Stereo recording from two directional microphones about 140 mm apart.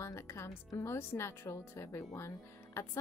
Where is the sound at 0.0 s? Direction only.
20° left (ahead or behind).